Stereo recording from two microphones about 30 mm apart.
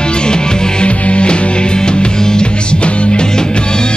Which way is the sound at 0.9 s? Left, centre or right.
Left.